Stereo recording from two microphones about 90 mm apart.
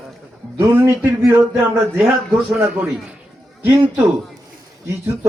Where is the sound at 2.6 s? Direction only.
20° right (ahead or behind).